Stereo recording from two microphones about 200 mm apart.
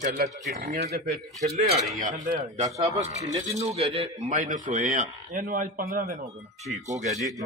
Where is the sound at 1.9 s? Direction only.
40° right (ahead or behind).